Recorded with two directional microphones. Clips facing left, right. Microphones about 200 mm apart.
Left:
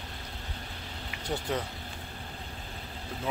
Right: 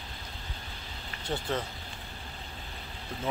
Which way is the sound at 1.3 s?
10° left (ahead or behind).